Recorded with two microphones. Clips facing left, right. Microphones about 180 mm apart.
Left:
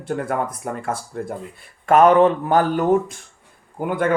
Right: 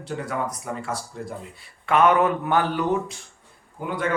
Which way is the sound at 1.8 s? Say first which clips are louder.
Left 6 dB; 40° left (ahead or behind).